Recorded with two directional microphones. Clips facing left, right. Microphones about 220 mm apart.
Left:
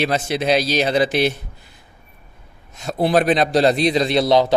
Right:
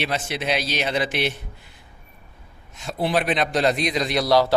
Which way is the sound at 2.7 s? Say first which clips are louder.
Left 6 dB; 40° left (ahead or behind).